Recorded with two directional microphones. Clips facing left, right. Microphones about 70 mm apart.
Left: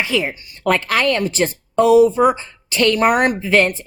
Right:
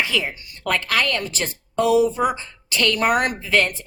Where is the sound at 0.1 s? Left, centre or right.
Left.